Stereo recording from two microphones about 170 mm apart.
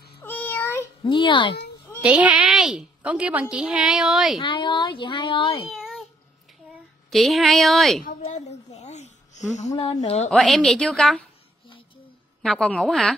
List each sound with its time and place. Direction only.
0.2 s a sound: 10° left (ahead or behind)
1.0 s speech: 30° left (ahead or behind)
2.0 s a woman's voice: 10° right (ahead or behind)
4.4 s speech: 30° left (ahead or behind)
5.7 s a sound: centre (ahead or behind)
7.1 s a woman's voice: centre (ahead or behind)
8.2 s a sound: 40° left (ahead or behind)
9.8 s a woman's voice: 35° left (ahead or behind)
10.3 s a woman's voice: centre (ahead or behind)
12.4 s a woman's voice: centre (ahead or behind)